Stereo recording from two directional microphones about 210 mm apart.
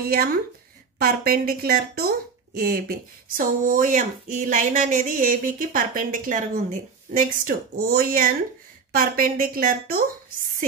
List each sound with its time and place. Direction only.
0.1 s speech: 45° right (ahead or behind)